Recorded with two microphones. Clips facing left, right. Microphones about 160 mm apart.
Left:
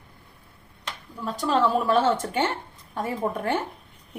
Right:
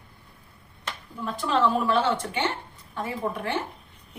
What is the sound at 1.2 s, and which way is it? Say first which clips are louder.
A woman's voice: left 1 dB; 40° left (ahead or behind).